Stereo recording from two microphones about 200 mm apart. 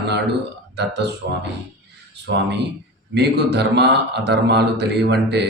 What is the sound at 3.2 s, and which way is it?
A man's voice, 55° right (ahead or behind).